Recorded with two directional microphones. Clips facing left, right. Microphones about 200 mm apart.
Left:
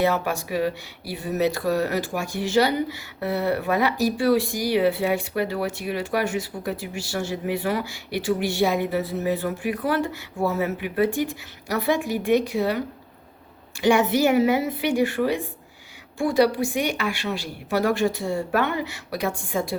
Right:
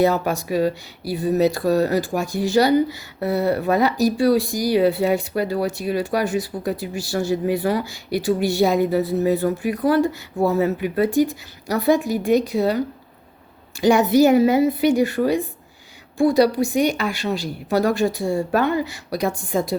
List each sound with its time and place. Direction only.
0.0 s speech: 35° right (ahead or behind)
13.8 s speech: 40° right (ahead or behind)